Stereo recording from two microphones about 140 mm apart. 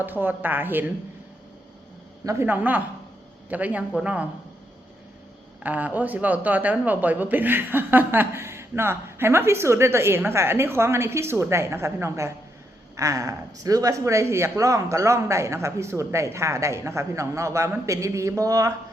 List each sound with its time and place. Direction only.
0.0 s speech: 15° right (ahead or behind)
2.2 s speech: 20° right (ahead or behind)
5.6 s speech: 10° right (ahead or behind)